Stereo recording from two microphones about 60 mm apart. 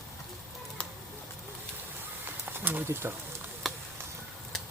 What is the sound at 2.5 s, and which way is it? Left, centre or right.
Speech, right.